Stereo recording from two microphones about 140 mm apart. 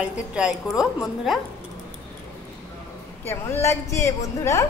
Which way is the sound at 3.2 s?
15° left (ahead or behind).